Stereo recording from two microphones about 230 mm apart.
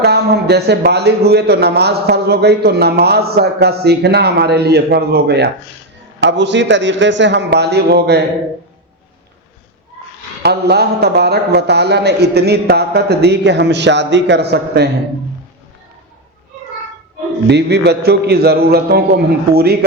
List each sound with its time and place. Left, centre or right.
0.0 s a man's voice: right
10.4 s a man's voice: right
17.5 s a man's voice: right